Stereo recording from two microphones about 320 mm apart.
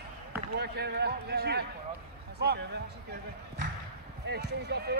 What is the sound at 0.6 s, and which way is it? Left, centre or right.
Speech, right.